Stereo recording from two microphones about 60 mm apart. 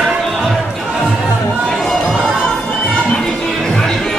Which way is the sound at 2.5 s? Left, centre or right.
Centre.